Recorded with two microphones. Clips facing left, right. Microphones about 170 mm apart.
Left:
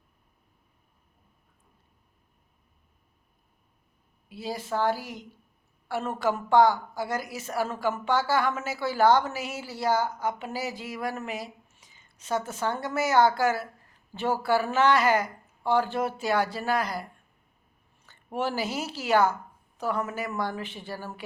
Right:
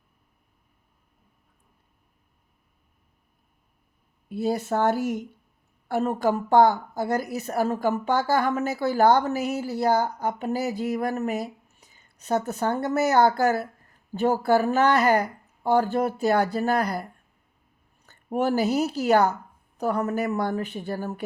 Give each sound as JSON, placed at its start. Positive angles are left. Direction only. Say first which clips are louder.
{"t": 4.3, "sound": "a woman's voice", "louder": "right 7 dB", "side_deg": -50}
{"t": 5.9, "sound": "a woman's voice", "louder": "right 5 dB", "side_deg": -40}
{"t": 18.3, "sound": "a woman's voice", "louder": "right 7 dB", "side_deg": -40}